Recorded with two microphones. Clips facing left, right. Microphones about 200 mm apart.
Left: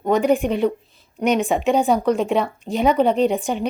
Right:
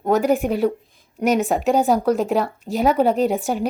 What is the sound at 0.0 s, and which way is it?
Speech, 5° right (ahead or behind).